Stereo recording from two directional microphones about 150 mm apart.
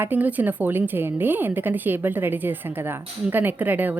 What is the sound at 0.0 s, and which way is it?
Speech, 10° right (ahead or behind).